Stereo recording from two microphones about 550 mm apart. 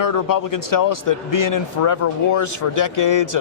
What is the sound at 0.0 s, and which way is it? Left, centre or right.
Speech, left.